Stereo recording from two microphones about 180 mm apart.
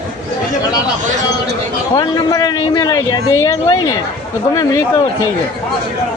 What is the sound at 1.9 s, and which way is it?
Speech, 20° left (ahead or behind).